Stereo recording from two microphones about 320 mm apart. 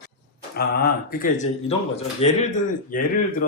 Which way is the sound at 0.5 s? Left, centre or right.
Left.